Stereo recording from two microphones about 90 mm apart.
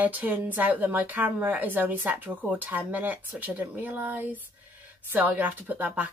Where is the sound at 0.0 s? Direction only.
20° right (ahead or behind).